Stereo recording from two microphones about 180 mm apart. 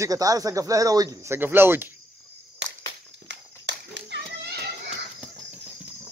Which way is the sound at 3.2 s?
75° right (ahead or behind).